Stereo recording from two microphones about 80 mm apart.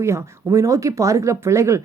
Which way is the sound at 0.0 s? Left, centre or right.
Right.